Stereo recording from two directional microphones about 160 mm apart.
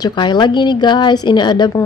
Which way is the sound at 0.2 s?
30° left (ahead or behind).